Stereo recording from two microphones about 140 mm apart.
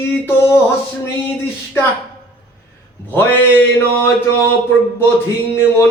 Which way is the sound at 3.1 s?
15° left (ahead or behind).